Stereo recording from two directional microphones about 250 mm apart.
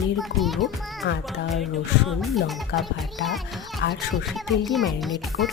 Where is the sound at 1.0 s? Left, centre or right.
Left.